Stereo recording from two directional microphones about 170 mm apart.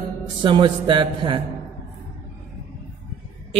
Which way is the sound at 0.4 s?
30° right (ahead or behind).